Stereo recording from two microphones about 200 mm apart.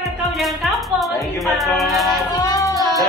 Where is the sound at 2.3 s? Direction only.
20° left (ahead or behind).